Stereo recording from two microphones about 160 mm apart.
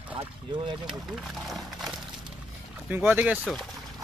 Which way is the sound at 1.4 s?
Centre (ahead or behind).